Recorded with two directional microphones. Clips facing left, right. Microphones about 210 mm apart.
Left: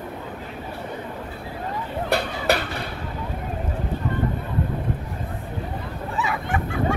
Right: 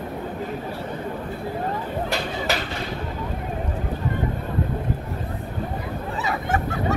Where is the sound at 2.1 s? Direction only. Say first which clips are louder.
Left 7 dB; 60° left (ahead or behind).